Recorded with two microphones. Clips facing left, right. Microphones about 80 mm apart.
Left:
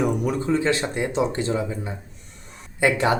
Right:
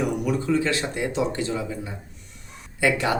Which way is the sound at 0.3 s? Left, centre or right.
Left.